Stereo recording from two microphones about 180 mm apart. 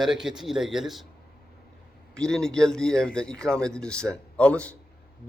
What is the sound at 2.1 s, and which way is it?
A man's voice, 5° left (ahead or behind).